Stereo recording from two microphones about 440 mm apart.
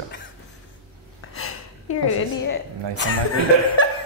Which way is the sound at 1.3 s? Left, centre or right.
Left.